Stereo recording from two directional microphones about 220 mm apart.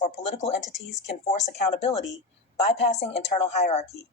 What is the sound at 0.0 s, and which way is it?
Speech, 20° left (ahead or behind).